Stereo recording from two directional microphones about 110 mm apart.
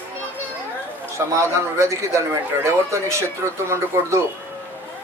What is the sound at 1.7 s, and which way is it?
Speech, 25° right (ahead or behind).